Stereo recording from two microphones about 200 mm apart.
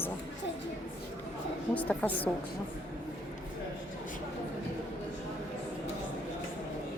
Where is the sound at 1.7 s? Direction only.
5° left (ahead or behind).